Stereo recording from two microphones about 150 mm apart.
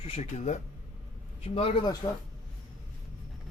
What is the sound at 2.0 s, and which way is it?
Speech, 25° left (ahead or behind).